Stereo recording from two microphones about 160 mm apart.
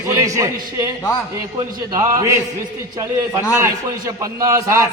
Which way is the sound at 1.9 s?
20° right (ahead or behind).